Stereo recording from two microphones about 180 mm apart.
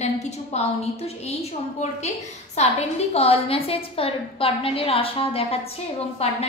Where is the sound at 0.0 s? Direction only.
40° left (ahead or behind).